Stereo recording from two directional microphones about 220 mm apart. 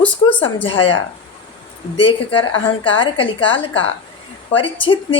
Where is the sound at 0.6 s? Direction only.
25° left (ahead or behind).